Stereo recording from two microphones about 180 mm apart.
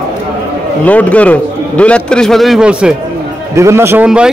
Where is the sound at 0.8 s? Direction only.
10° left (ahead or behind).